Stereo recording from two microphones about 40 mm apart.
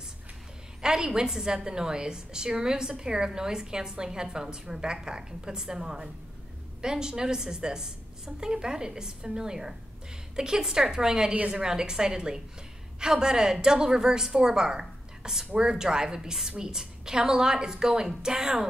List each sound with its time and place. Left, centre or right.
0.8 s a woman's voice: centre
11.6 s a woman's voice: centre